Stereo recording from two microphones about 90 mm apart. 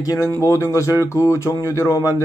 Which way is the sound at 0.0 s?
40° left (ahead or behind).